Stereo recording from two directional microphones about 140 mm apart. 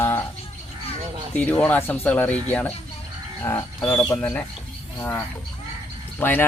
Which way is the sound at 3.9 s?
15° left (ahead or behind).